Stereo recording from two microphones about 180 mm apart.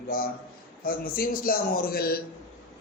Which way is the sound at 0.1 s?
55° left (ahead or behind).